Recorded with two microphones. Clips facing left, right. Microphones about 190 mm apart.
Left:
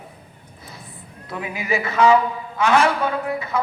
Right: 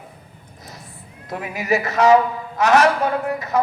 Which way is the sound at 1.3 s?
40° right (ahead or behind).